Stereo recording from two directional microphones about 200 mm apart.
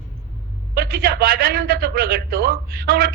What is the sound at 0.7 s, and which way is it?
A man's voice, 50° right (ahead or behind).